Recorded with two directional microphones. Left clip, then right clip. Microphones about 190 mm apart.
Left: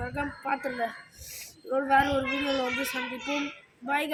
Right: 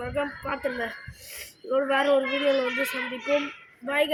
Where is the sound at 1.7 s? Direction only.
10° left (ahead or behind).